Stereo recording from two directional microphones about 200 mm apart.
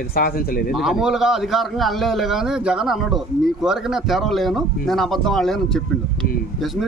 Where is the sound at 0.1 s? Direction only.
45° left (ahead or behind).